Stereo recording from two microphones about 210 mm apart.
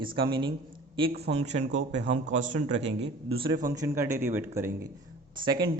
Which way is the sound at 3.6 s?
15° right (ahead or behind).